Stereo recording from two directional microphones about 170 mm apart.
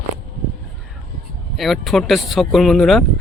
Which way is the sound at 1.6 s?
Centre (ahead or behind).